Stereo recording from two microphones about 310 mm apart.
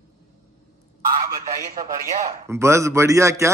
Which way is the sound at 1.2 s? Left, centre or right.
Right.